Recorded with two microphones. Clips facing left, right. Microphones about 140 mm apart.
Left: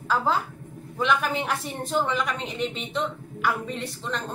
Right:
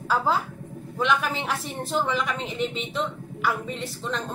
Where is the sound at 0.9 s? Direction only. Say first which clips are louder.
Even; centre (ahead or behind).